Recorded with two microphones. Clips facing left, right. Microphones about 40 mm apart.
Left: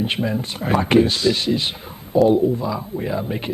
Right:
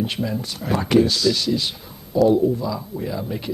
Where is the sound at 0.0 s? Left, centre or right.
Left.